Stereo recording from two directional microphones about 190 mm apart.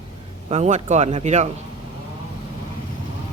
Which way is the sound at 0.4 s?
35° right (ahead or behind).